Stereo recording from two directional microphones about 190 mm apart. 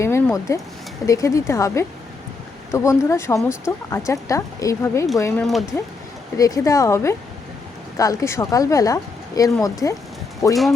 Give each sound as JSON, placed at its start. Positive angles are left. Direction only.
{"t": 0.0, "sound": "a sound", "side_deg": 15}
{"t": 1.0, "sound": "speech", "side_deg": 15}
{"t": 5.4, "sound": "speech", "side_deg": 0}
{"t": 6.3, "sound": "speech", "side_deg": 20}
{"t": 10.5, "sound": "speech", "side_deg": 0}